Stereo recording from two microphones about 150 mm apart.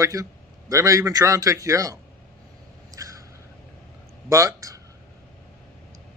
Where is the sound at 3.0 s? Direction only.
20° right (ahead or behind).